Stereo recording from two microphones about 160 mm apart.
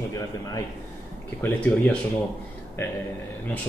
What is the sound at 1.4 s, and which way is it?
Speech, 10° left (ahead or behind).